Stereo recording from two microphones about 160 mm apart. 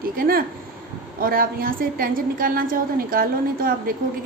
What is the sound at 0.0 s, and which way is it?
A woman's voice, 65° right (ahead or behind).